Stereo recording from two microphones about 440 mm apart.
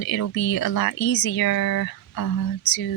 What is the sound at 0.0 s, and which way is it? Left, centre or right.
A woman's voice, left.